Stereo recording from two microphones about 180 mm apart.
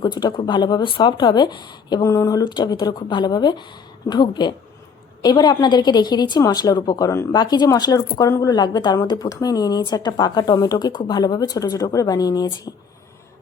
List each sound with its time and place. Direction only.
0.0 s a woman's voice: 25° left (ahead or behind)